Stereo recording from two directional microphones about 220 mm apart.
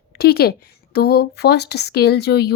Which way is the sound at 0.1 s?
45° left (ahead or behind).